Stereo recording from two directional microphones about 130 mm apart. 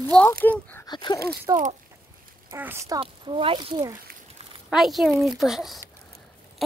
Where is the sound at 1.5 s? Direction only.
20° right (ahead or behind).